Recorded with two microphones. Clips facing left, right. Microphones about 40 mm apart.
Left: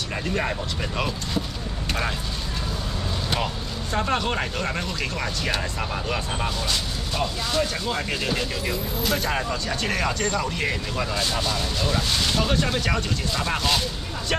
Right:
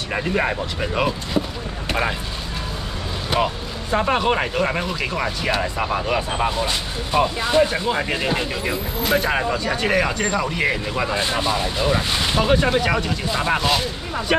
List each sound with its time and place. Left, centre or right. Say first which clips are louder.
0.1 s speech: right 6 dB; right
3.3 s speech: right 8 dB; centre